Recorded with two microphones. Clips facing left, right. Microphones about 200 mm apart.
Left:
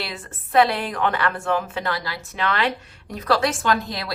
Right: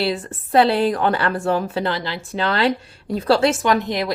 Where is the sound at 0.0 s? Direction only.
30° right (ahead or behind).